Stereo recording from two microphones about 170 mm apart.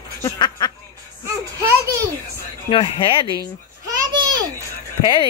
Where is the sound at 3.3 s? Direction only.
20° right (ahead or behind).